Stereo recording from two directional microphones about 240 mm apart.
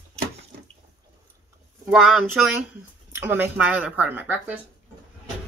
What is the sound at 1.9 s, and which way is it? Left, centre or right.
Speech, centre.